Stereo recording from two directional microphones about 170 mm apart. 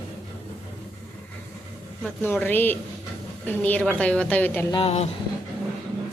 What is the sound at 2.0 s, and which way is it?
A woman's voice, 10° left (ahead or behind).